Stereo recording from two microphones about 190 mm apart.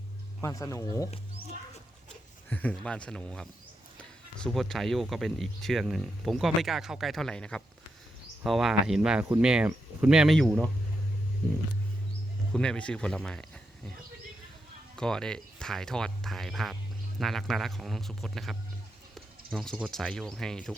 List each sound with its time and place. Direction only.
0.4 s speech: 15° left (ahead or behind)
12.5 s speech: 5° left (ahead or behind)
14.9 s speech: 5° left (ahead or behind)